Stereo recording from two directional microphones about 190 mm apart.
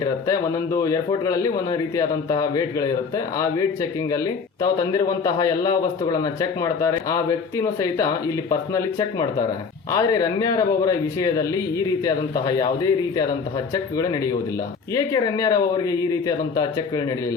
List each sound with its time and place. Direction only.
0.0 s speech: 15° left (ahead or behind)
4.1 s speech: 20° left (ahead or behind)